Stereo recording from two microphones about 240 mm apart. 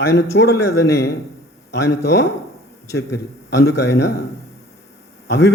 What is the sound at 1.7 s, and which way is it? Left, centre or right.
Speech, left.